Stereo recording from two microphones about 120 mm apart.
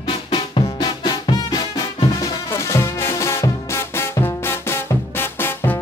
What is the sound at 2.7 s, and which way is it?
Music, 20° left (ahead or behind).